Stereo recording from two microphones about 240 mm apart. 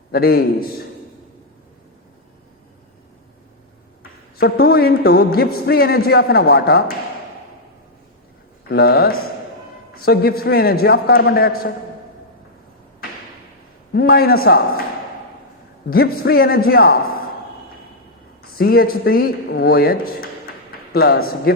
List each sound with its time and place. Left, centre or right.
0.1 s a man's voice: left
4.4 s a man's voice: left
8.7 s a man's voice: left
13.9 s a man's voice: left
15.9 s a man's voice: left
18.4 s a man's voice: left